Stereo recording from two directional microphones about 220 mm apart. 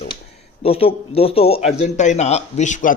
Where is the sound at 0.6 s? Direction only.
25° left (ahead or behind).